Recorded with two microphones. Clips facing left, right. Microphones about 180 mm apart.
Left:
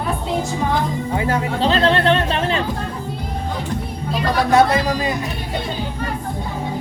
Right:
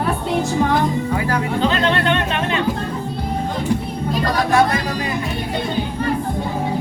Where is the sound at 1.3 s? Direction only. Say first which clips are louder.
Left 1 dB; 30° left (ahead or behind).